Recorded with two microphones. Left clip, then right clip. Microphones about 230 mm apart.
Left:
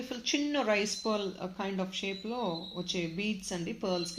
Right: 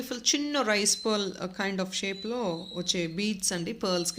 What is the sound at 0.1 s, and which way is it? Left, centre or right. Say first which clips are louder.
Speech: right 4 dB; right.